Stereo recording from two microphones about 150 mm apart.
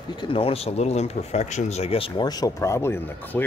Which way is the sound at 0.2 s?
35° left (ahead or behind).